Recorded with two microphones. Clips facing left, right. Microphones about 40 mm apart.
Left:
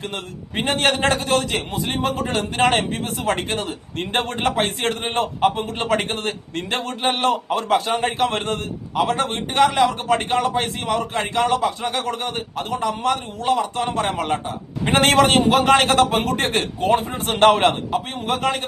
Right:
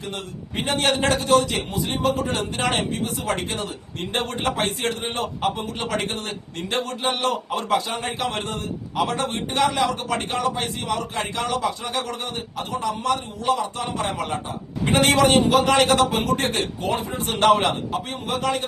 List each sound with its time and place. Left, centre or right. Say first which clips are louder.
0.5 s a man's voice: left 2 dB; left